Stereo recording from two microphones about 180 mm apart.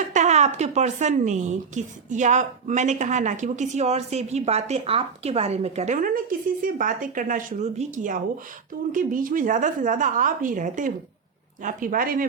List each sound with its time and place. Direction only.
0.1 s a woman's voice: 40° right (ahead or behind)